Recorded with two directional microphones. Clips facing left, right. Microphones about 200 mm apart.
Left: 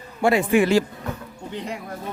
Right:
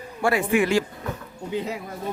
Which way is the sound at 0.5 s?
35° left (ahead or behind).